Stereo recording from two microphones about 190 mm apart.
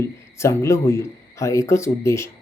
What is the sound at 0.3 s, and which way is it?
Speech, 15° left (ahead or behind).